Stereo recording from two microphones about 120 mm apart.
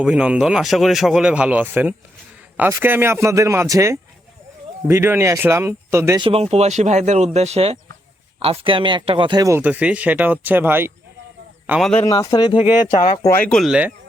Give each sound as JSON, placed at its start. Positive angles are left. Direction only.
{"t": 0.0, "sound": "speech", "side_deg": -10}
{"t": 6.1, "sound": "speech", "side_deg": -50}
{"t": 7.3, "sound": "speech", "side_deg": -65}
{"t": 8.4, "sound": "speech", "side_deg": -50}
{"t": 9.6, "sound": "speech", "side_deg": -15}
{"t": 12.0, "sound": "speech", "side_deg": 30}
{"t": 13.2, "sound": "speech", "side_deg": 20}
{"t": 13.5, "sound": "speech", "side_deg": 0}